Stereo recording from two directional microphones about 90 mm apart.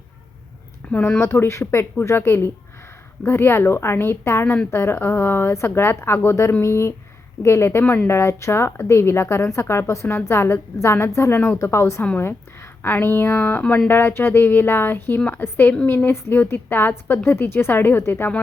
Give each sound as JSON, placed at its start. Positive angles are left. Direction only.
{"t": 0.9, "sound": "speech", "side_deg": 15}
{"t": 1.2, "sound": "a woman's voice", "side_deg": 30}